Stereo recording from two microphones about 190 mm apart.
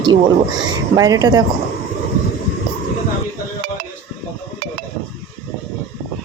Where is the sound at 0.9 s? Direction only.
20° right (ahead or behind).